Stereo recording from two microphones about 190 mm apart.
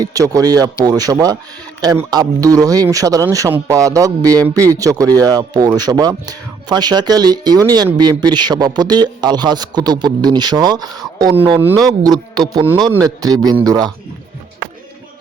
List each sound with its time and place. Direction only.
0.0 s a man's voice: 20° right (ahead or behind)